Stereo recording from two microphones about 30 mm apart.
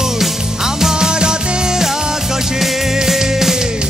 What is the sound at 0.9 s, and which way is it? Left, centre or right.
Music, right.